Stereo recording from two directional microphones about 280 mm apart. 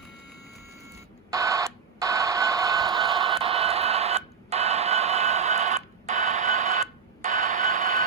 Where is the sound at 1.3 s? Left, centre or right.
Centre.